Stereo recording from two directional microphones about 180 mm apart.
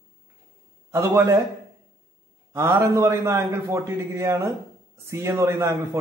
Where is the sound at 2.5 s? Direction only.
15° right (ahead or behind).